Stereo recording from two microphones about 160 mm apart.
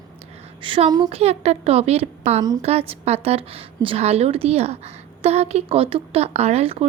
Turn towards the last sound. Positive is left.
turn(degrees=-40)  # may be behind; listen again after turning